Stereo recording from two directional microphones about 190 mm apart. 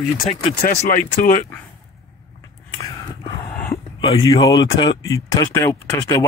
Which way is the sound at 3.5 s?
5° left (ahead or behind).